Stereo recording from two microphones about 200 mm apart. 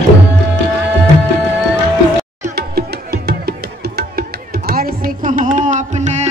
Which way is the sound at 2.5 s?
55° right (ahead or behind).